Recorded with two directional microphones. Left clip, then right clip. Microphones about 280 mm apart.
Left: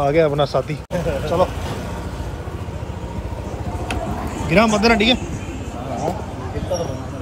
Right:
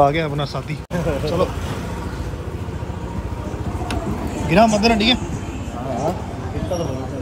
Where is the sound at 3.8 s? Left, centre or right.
Centre.